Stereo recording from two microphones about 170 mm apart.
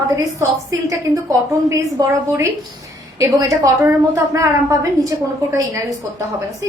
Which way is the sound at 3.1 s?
20° right (ahead or behind).